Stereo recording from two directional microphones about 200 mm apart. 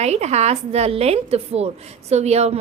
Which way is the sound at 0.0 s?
35° right (ahead or behind).